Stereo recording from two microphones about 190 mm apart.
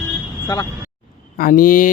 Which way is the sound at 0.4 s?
20° left (ahead or behind).